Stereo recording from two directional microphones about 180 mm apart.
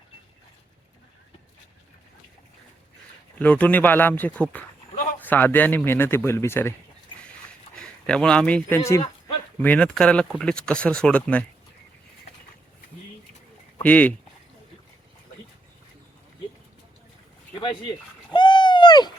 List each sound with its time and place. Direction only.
3.3 s speech: 5° left (ahead or behind)
8.0 s speech: 5° left (ahead or behind)
9.6 s speech: 5° left (ahead or behind)
13.7 s speech: 10° left (ahead or behind)
17.5 s a sound: 25° left (ahead or behind)